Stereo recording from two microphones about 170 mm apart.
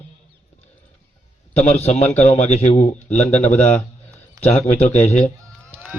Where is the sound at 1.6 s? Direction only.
40° left (ahead or behind).